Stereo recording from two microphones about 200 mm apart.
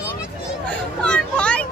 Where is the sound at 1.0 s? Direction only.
5° left (ahead or behind).